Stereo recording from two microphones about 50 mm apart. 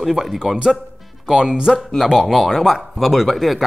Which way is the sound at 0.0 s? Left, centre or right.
Centre.